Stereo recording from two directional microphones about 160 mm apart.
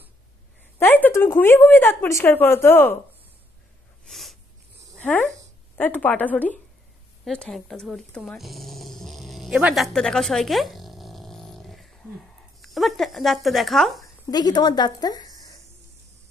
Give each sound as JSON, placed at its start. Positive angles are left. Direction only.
{"t": 0.7, "sound": "speech", "side_deg": 10}
{"t": 4.0, "sound": "snort", "side_deg": 0}
{"t": 4.9, "sound": "a sound", "side_deg": 10}
{"t": 5.8, "sound": "speech", "side_deg": 10}
{"t": 7.2, "sound": "dog", "side_deg": 5}
{"t": 12.6, "sound": "speech", "side_deg": 0}
{"t": 14.3, "sound": "a woman's voice", "side_deg": 25}